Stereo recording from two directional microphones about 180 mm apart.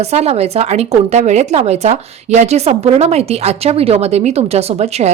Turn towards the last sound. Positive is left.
turn(degrees=-35)  # may be behind; listen again after turning